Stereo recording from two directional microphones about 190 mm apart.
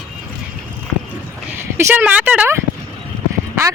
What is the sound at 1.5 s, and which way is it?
Speech, 10° right (ahead or behind).